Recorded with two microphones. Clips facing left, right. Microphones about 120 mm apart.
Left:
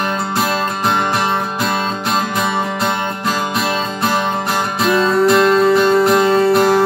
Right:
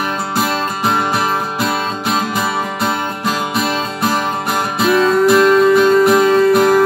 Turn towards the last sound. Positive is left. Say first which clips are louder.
# right 1 dB
turn(degrees=0)  # may be behind; listen again after turning